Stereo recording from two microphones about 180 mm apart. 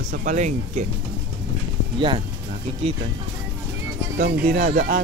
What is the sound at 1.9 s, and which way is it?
Speech, 30° right (ahead or behind).